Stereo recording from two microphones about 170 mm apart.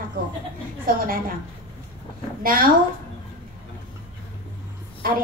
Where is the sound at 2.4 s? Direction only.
55° right (ahead or behind).